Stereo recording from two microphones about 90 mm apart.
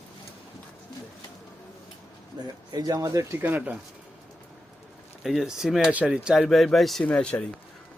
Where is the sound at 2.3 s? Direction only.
55° right (ahead or behind); by 3.4 s 35° right (ahead or behind).